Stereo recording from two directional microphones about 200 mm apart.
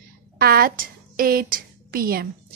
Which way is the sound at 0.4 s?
50° right (ahead or behind).